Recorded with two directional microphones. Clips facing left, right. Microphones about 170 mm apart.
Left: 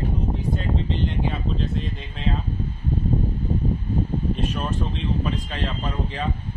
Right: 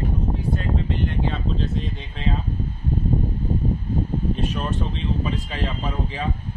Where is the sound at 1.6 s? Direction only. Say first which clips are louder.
Right 1 dB; centre (ahead or behind).